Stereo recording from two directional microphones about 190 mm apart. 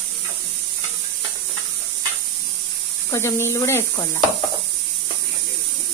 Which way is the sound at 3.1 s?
15° left (ahead or behind).